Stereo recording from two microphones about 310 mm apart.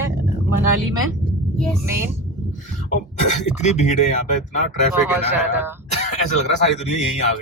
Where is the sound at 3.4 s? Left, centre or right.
Left.